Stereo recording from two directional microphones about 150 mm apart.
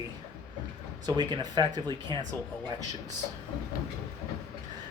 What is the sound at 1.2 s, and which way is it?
Speech, 30° right (ahead or behind).